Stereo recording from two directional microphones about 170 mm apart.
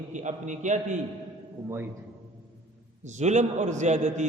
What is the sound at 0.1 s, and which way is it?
Speech, 45° right (ahead or behind).